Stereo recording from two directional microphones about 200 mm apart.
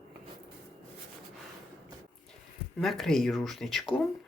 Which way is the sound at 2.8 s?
Centre (ahead or behind).